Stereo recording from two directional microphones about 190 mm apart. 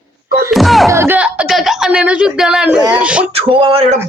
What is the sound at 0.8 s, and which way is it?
Speech, 15° right (ahead or behind).